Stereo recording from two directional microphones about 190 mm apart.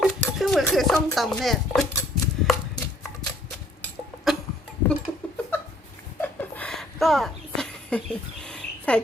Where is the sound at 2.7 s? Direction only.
20° left (ahead or behind).